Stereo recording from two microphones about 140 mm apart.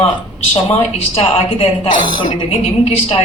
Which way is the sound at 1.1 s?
40° left (ahead or behind).